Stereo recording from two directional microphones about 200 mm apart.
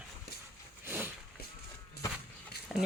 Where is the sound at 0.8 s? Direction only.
10° right (ahead or behind).